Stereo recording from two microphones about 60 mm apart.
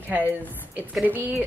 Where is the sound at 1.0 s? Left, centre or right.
Right.